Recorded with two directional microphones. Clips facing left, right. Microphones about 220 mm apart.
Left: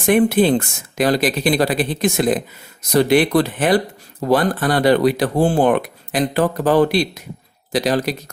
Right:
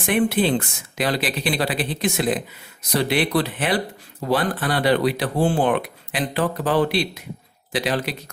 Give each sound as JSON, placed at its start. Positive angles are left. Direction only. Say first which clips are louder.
{"t": 0.0, "sound": "speech", "louder": "left 6 dB", "side_deg": 45}